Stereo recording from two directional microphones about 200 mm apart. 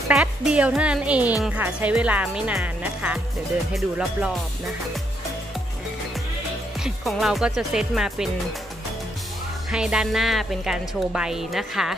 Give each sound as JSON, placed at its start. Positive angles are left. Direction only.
{"t": 0.1, "sound": "a woman's voice", "side_deg": -5}
{"t": 6.8, "sound": "a woman's voice", "side_deg": 0}
{"t": 9.7, "sound": "a woman's voice", "side_deg": -5}